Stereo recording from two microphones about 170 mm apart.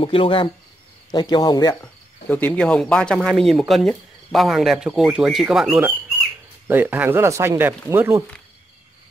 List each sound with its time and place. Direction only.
0.0 s speech: 30° left (ahead or behind)
2.2 s speech: 10° left (ahead or behind); by 8.2 s 15° right (ahead or behind)